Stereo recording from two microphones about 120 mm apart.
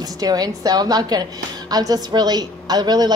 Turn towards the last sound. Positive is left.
turn(degrees=-35)  # may be behind; listen again after turning